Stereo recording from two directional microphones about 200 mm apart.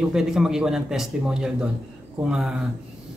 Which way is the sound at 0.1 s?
5° right (ahead or behind).